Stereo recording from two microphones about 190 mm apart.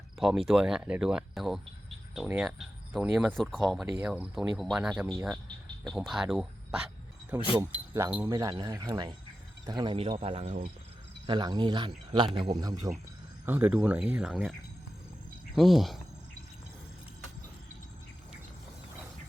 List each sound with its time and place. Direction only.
0.2 s speech: centre (ahead or behind); by 10.7 s 40° right (ahead or behind)
11.3 s speech: 25° right (ahead or behind)
13.4 s speech: 10° right (ahead or behind)
15.5 s speech: centre (ahead or behind)